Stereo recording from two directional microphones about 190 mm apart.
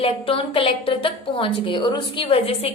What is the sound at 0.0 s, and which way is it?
A woman's voice, 30° left (ahead or behind).